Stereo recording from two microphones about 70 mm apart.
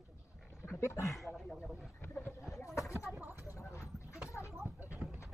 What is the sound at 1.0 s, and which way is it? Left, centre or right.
Speech, centre.